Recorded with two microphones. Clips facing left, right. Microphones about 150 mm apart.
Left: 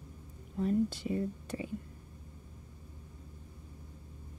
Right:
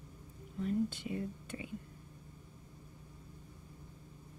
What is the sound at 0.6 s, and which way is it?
Speech, 40° left (ahead or behind).